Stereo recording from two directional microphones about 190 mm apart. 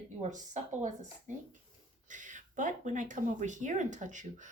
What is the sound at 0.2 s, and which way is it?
Speech, 40° right (ahead or behind).